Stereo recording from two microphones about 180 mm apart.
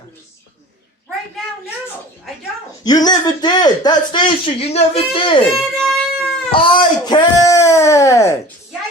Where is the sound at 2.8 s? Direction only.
20° left (ahead or behind).